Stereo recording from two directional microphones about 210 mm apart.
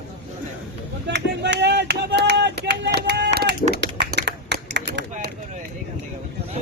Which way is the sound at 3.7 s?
50° right (ahead or behind).